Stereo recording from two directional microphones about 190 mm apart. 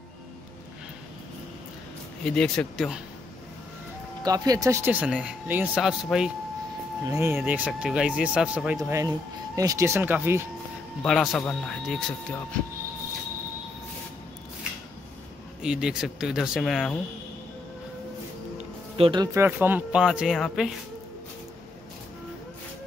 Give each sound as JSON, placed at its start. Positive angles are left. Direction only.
{"t": 2.2, "sound": "speech", "side_deg": 5}
{"t": 4.2, "sound": "speech", "side_deg": -20}
{"t": 11.0, "sound": "speech", "side_deg": 0}
{"t": 15.6, "sound": "speech", "side_deg": -5}
{"t": 18.9, "sound": "speech", "side_deg": -25}